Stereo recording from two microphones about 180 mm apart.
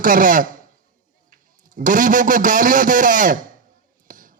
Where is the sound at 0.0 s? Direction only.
50° right (ahead or behind).